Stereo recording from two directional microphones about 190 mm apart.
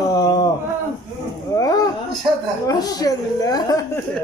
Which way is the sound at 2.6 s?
20° left (ahead or behind).